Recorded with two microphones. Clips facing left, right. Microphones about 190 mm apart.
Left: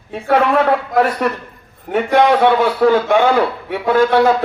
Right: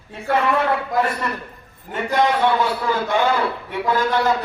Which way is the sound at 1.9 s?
75° left (ahead or behind).